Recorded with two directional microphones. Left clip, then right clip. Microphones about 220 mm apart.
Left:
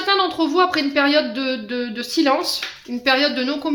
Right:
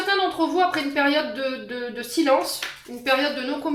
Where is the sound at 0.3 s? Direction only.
45° left (ahead or behind).